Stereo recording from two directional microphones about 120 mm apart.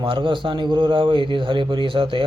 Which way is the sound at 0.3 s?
40° right (ahead or behind).